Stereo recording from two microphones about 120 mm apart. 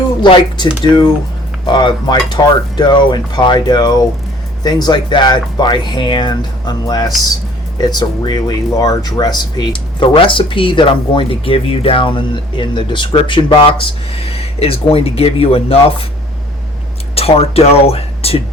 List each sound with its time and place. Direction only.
0.2 s speech: 40° left (ahead or behind)
17.2 s speech: 55° left (ahead or behind)